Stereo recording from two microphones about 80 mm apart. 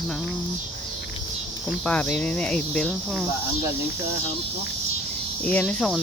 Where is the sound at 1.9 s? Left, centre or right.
Centre.